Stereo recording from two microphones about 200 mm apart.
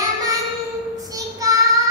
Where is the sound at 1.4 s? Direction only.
15° right (ahead or behind).